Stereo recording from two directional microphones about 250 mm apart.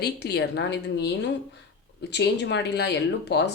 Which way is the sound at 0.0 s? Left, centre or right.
Left.